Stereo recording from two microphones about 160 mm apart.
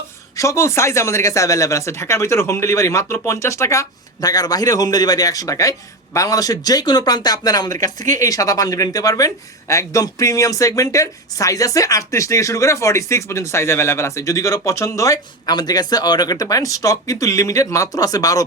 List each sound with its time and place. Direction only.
0.3 s speech: 20° left (ahead or behind)